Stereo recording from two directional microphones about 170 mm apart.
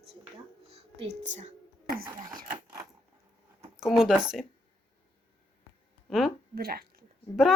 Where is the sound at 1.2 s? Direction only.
45° right (ahead or behind).